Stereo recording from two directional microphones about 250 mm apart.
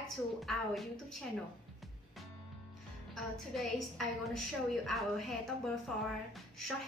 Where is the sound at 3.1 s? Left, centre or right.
Centre.